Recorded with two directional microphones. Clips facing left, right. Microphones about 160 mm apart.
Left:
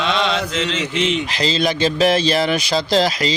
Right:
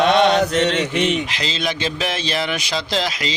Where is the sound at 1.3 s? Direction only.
35° left (ahead or behind).